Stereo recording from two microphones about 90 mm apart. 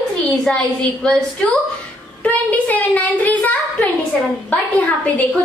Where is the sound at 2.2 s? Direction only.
15° left (ahead or behind).